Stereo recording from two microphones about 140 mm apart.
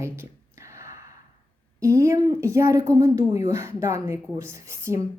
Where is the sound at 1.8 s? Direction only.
20° right (ahead or behind).